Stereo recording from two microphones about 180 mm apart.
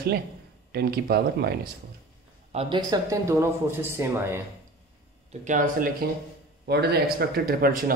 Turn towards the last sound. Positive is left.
turn(degrees=-55)  # may be behind; listen again after turning